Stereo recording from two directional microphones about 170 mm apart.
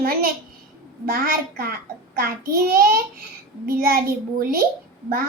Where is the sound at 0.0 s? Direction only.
60° right (ahead or behind).